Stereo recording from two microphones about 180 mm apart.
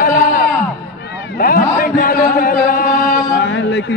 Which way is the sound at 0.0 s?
50° left (ahead or behind).